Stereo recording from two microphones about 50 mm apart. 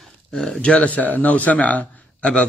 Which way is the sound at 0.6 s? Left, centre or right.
Left.